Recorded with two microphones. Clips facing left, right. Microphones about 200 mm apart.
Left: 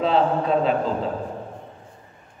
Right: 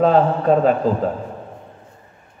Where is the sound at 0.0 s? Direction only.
45° right (ahead or behind).